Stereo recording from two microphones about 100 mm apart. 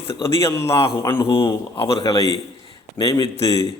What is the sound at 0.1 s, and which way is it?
A man's voice, 25° left (ahead or behind).